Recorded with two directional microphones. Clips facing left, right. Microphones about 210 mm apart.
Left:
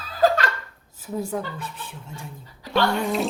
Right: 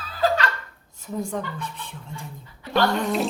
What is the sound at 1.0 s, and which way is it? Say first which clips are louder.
Speech: left 1 dB; 5° left (ahead or behind).